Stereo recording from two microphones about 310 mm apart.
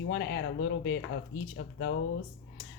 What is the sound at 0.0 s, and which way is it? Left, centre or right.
Speech, left.